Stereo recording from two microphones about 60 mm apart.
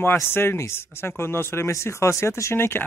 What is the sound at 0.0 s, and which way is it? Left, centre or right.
Speech, left.